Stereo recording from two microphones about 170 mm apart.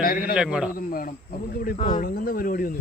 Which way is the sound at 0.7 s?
55° left (ahead or behind).